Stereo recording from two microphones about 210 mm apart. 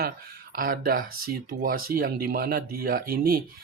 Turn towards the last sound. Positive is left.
turn(degrees=-45)  # may be behind; listen again after turning